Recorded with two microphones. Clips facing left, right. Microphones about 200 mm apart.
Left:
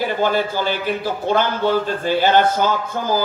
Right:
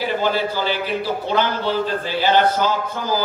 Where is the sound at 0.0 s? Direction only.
50° left (ahead or behind).